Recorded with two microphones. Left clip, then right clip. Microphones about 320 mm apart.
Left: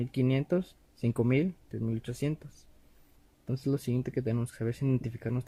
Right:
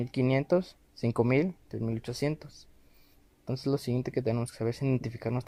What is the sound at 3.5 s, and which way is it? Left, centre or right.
Speech, right.